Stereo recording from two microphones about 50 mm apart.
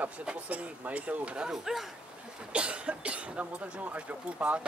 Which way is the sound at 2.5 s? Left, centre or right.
Right.